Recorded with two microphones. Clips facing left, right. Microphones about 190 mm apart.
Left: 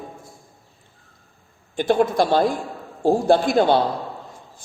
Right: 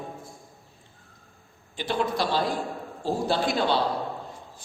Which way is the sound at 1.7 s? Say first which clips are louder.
Left 9 dB; 50° left (ahead or behind).